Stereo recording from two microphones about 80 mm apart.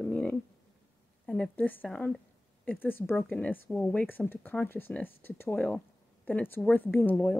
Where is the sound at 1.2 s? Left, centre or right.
Centre.